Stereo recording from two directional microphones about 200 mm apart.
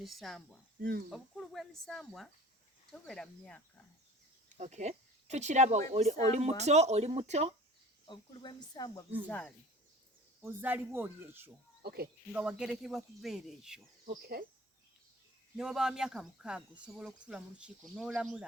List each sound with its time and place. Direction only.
0.0 s speech: centre (ahead or behind)
0.8 s speech: 45° right (ahead or behind)
1.1 s speech: centre (ahead or behind)
4.5 s speech: 35° right (ahead or behind)
8.0 s speech: 25° left (ahead or behind)
9.2 s speech: 5° left (ahead or behind)
10.4 s speech: 10° right (ahead or behind)
11.8 s speech: 50° right (ahead or behind)
12.3 s speech: 5° right (ahead or behind)
14.0 s speech: 45° right (ahead or behind)
15.5 s speech: 5° right (ahead or behind)